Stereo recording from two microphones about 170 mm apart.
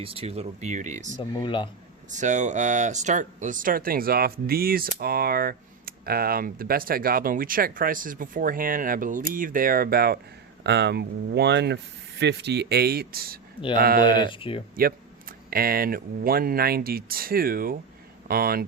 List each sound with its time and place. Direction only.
0.0 s speech: 35° right (ahead or behind)
1.3 s speech: 30° left (ahead or behind)
2.0 s speech: 45° right (ahead or behind); by 10.2 s 65° right (ahead or behind)
10.6 s speech: 80° right; by 14.3 s 60° right (ahead or behind)
14.3 s speech: 30° left (ahead or behind)
14.8 s speech: 60° right (ahead or behind)